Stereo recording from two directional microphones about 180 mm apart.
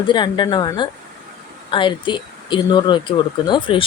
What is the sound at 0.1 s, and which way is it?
Speech, 25° left (ahead or behind).